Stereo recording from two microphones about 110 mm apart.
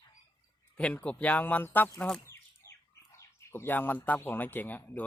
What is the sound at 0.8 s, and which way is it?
Speech, 10° left (ahead or behind).